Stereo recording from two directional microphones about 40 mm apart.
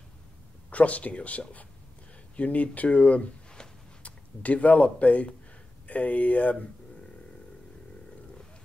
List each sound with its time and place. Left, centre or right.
0.7 s speech: left